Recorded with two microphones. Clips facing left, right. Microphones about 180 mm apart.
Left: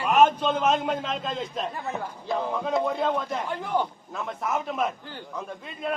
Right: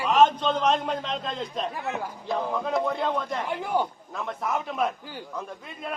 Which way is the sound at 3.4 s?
10° right (ahead or behind).